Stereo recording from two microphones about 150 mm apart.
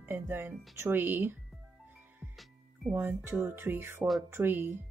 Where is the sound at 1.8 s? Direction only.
10° right (ahead or behind).